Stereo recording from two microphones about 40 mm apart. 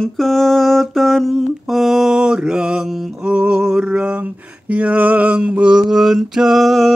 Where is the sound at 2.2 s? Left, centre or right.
Centre.